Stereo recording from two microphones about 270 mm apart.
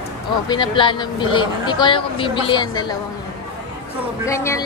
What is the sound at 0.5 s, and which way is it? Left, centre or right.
Speech, centre.